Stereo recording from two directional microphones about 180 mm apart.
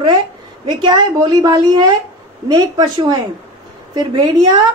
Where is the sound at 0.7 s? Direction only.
25° right (ahead or behind).